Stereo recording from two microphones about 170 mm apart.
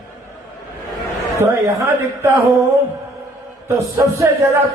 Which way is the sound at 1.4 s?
15° right (ahead or behind).